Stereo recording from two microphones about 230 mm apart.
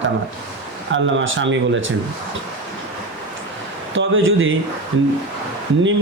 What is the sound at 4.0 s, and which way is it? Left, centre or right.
Speech, right.